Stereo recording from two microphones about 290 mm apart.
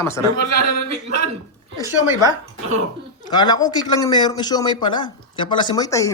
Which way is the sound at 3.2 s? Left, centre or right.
Centre.